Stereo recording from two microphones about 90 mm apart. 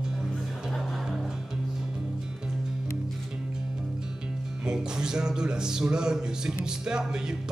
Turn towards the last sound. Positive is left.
turn(degrees=-10)  # may be behind; listen again after turning